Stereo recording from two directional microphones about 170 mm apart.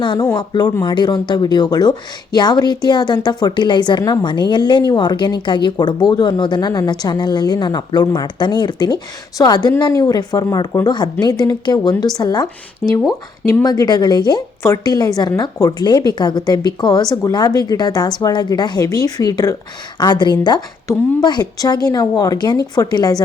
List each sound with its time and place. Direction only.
0.0 s a woman's voice: 25° left (ahead or behind)